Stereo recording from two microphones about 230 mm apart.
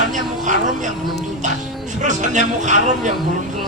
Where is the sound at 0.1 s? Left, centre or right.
Right.